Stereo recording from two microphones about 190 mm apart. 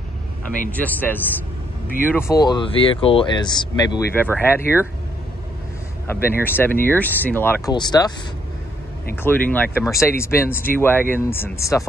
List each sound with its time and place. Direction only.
0.7 s speech: 10° left (ahead or behind)
4.1 s speech: 10° left (ahead or behind)
6.0 s speech: 10° left (ahead or behind)
7.7 s speech: 20° left (ahead or behind)
9.1 s speech: 10° left (ahead or behind)